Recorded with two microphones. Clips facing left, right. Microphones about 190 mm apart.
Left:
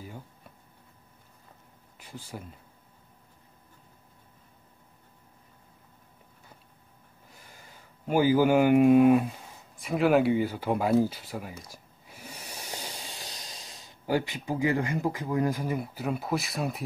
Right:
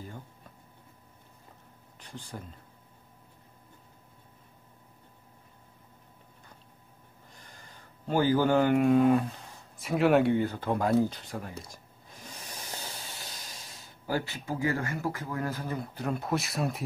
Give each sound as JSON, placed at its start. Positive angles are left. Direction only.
{"t": 0.0, "sound": "a sound", "side_deg": 10}
{"t": 2.0, "sound": "speech", "side_deg": 10}
{"t": 7.3, "sound": "speech", "side_deg": 10}
{"t": 9.8, "sound": "speech", "side_deg": 0}
{"t": 11.7, "sound": "hiss", "side_deg": 10}
{"t": 13.8, "sound": "speech", "side_deg": 15}